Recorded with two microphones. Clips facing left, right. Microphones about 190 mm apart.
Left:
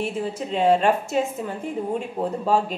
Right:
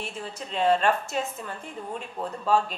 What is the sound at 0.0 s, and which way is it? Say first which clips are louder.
A woman's voice: left 9 dB; 5° left (ahead or behind).